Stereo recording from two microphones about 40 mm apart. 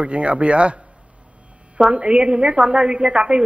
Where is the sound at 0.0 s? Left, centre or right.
Right.